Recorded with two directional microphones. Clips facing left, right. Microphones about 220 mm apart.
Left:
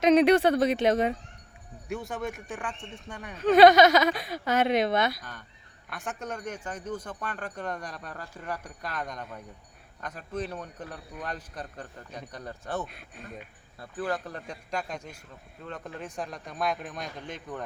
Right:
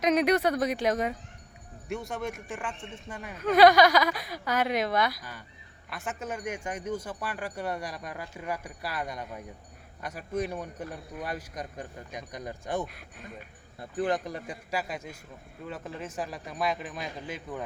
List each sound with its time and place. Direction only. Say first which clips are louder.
0.0 s speech: left 4 dB; 30° left (ahead or behind)
1.9 s speech: even; centre (ahead or behind)
3.3 s speech: left 2 dB; 25° left (ahead or behind)
6.1 s speech: right 1 dB; 5° right (ahead or behind)